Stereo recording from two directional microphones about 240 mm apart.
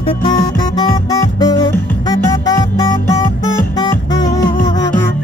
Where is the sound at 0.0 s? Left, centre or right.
Centre.